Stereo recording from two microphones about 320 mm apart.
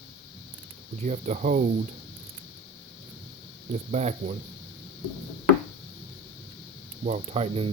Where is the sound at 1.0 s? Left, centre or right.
Right.